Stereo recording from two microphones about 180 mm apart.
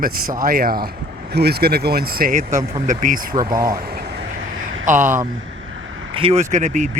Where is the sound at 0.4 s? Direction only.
55° right (ahead or behind).